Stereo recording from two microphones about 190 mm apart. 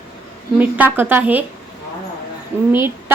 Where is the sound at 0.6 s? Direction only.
10° right (ahead or behind).